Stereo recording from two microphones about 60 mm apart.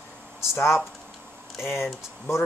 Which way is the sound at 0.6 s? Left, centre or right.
Left.